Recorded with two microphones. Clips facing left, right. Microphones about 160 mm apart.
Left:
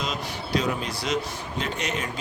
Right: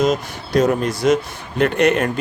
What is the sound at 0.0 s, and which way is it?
Speech, 45° right (ahead or behind).